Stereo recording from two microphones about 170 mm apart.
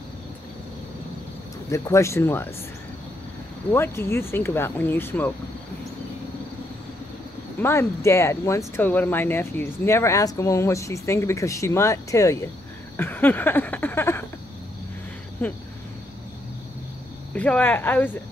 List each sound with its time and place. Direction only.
1.7 s speech: 15° left (ahead or behind)
3.7 s speech: 15° left (ahead or behind)
7.6 s speech: 15° left (ahead or behind)
12.9 s a sound: 10° left (ahead or behind)
15.4 s speech: 15° left (ahead or behind)
17.3 s speech: 10° left (ahead or behind)